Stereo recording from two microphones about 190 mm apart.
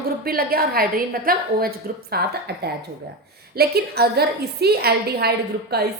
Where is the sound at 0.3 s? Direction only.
50° right (ahead or behind).